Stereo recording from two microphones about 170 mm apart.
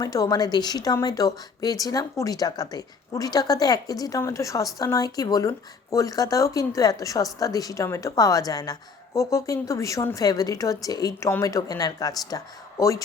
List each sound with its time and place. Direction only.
0.0 s speech: 20° left (ahead or behind)